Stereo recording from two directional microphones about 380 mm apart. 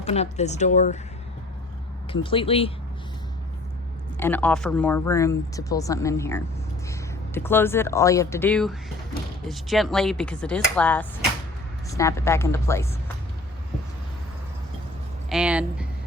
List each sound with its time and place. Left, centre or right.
0.0 s speech: centre
2.1 s speech: centre
4.2 s speech: centre
15.3 s speech: centre